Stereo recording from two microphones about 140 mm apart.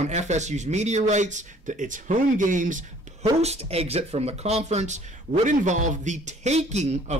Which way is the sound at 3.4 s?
50° right (ahead or behind).